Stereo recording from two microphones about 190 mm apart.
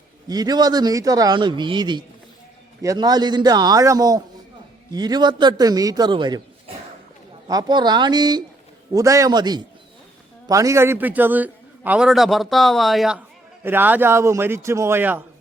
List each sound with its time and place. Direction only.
0.3 s a man's voice: 20° right (ahead or behind)
7.4 s a man's voice: 20° right (ahead or behind)